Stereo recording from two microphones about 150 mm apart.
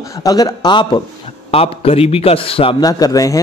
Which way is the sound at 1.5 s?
40° left (ahead or behind).